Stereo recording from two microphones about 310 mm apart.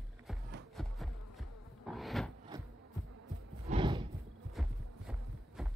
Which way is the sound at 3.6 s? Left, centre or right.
Centre.